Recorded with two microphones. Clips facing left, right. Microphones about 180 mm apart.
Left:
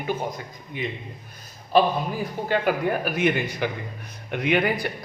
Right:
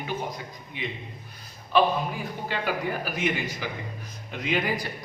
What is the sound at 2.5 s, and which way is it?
Speech, 55° left (ahead or behind).